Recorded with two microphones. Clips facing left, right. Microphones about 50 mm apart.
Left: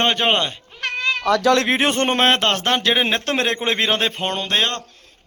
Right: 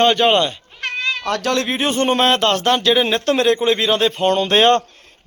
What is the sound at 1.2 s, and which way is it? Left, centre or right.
Speech, left.